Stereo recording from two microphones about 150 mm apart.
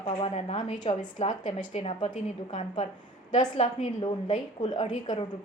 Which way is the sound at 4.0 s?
30° left (ahead or behind).